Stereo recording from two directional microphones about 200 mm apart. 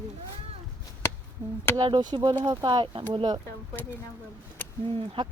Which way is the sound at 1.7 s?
20° right (ahead or behind).